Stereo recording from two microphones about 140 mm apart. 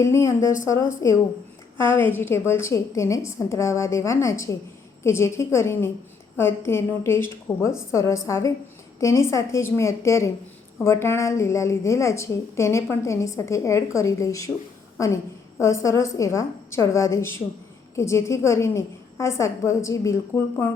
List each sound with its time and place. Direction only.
0.0 s a woman's voice: 20° left (ahead or behind)